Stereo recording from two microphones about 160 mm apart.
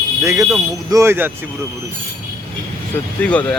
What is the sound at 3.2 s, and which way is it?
Speech, 10° left (ahead or behind).